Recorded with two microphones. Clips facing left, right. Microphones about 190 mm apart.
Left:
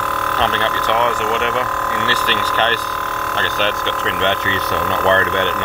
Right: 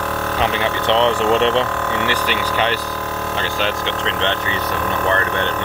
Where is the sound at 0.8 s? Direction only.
25° right (ahead or behind).